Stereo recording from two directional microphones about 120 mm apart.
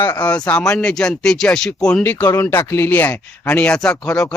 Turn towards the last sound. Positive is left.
turn(degrees=5)  # may be behind; listen again after turning